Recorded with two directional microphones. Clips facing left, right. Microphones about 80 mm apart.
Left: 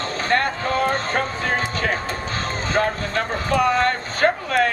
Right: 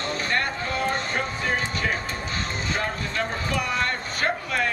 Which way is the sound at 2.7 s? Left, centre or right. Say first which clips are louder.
Left 8 dB; left.